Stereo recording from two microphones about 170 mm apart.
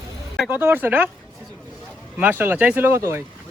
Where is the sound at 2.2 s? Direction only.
10° right (ahead or behind).